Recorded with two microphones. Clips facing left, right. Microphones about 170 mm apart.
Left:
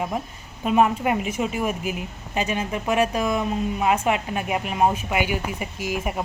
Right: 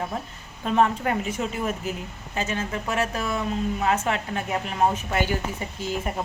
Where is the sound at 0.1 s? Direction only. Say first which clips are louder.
Left 3 dB; 10° left (ahead or behind).